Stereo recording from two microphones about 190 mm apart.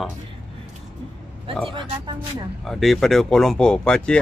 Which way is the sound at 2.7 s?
Centre (ahead or behind).